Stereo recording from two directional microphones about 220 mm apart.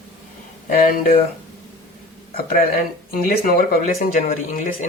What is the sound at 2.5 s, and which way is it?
Speech, 40° left (ahead or behind).